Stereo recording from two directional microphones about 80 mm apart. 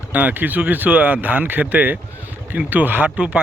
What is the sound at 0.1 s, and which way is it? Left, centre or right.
Speech, right.